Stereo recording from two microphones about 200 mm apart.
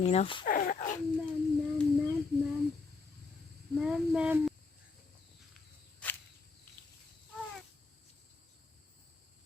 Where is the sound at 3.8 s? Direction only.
5° right (ahead or behind).